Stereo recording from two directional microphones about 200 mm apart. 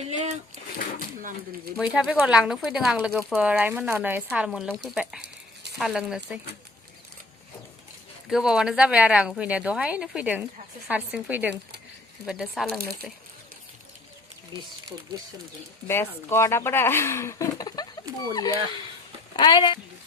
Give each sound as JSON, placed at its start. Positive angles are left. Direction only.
{"t": 0.0, "sound": "a sound", "side_deg": -30}
{"t": 1.8, "sound": "a woman's voice", "side_deg": -5}
{"t": 8.3, "sound": "a woman's voice", "side_deg": -5}
{"t": 14.5, "sound": "speech", "side_deg": -20}
{"t": 15.9, "sound": "speech", "side_deg": 15}
{"t": 19.4, "sound": "speech", "side_deg": 20}